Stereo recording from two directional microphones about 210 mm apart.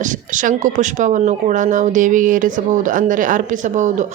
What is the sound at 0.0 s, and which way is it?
A woman's voice, 35° right (ahead or behind).